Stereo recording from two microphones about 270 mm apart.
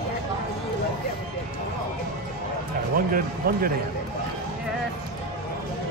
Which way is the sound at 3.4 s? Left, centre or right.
Right.